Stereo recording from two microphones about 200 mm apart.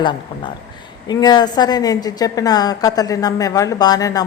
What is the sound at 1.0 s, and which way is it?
A woman's voice, 20° left (ahead or behind).